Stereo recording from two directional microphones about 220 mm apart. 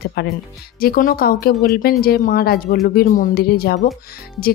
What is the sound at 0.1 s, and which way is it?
A woman's voice, 45° left (ahead or behind).